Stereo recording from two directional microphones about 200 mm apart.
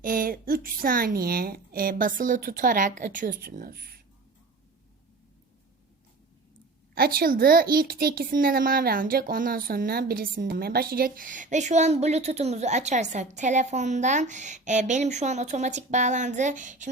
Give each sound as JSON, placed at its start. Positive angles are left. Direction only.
{"t": 0.0, "sound": "speech", "side_deg": -45}
{"t": 6.9, "sound": "speech", "side_deg": -50}